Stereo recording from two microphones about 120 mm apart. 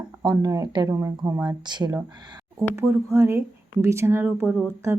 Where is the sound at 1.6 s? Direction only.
40° right (ahead or behind).